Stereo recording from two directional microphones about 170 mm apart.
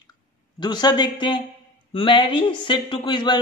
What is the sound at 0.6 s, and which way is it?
A man's voice, 25° left (ahead or behind).